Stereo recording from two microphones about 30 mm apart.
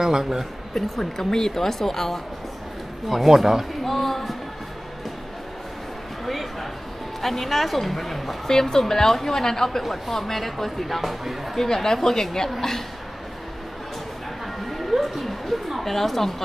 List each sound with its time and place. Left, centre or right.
0.0 s speech: centre
0.7 s a woman's voice: centre
3.3 s speech: centre
3.8 s a sound: centre
6.2 s a sound: centre
7.2 s speech: centre
8.5 s a woman's voice: centre
9.8 s speech: centre
11.5 s a woman's voice: centre
14.7 s a sound: centre